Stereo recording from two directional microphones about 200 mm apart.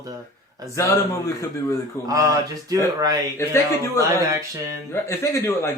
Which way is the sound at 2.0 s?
15° right (ahead or behind).